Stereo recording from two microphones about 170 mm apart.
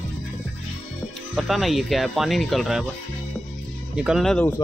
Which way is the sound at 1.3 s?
Centre (ahead or behind).